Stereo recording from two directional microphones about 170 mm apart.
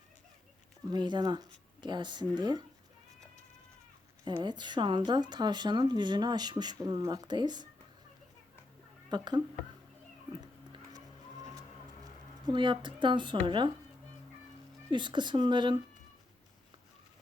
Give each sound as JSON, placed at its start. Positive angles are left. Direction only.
{"t": 0.9, "sound": "speech", "side_deg": -25}
{"t": 4.4, "sound": "speech", "side_deg": -25}
{"t": 9.0, "sound": "speech", "side_deg": -25}
{"t": 10.4, "sound": "music", "side_deg": -25}
{"t": 12.5, "sound": "speech", "side_deg": -30}
{"t": 14.8, "sound": "speech", "side_deg": -30}